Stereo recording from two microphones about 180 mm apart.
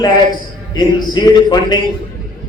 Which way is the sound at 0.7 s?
25° left (ahead or behind).